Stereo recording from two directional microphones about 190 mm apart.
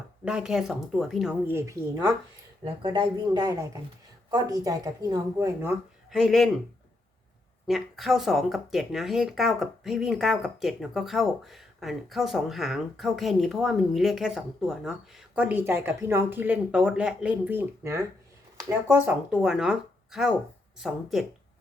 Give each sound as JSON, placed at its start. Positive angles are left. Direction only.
{"t": 0.3, "sound": "a woman's voice", "side_deg": -5}
{"t": 5.6, "sound": "speech", "side_deg": 0}
{"t": 7.7, "sound": "speech", "side_deg": 0}